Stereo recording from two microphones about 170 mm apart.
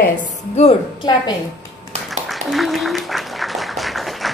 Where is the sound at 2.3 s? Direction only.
Centre (ahead or behind).